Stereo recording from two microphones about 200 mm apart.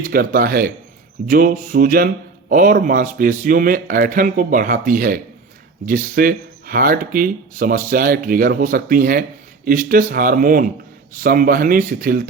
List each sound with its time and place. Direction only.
0.0 s speech: 45° right (ahead or behind)